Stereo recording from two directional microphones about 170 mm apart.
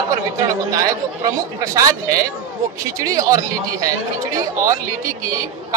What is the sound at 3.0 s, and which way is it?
Speech, 20° right (ahead or behind).